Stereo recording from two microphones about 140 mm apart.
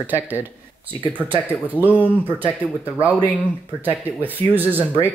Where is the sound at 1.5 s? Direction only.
10° right (ahead or behind).